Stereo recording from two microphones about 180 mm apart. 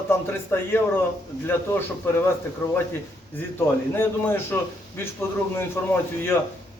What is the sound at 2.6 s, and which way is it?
A man's voice, 15° left (ahead or behind).